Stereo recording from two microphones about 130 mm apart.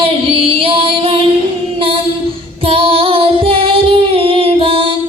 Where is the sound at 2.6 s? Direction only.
45° right (ahead or behind).